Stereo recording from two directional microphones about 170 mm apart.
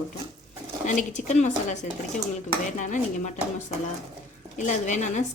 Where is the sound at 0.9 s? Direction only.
45° left (ahead or behind).